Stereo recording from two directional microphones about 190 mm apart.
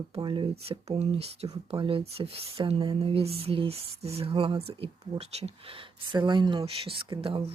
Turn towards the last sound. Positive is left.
turn(degrees=-30)  # may be behind; listen again after turning